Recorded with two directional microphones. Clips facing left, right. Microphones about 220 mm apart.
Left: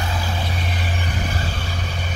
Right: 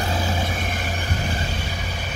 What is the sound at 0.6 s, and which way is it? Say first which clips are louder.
Vehicle: even; 45° right (ahead or behind).